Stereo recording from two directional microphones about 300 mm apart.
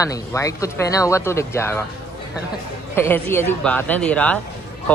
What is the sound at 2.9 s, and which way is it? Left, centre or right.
Speech, centre.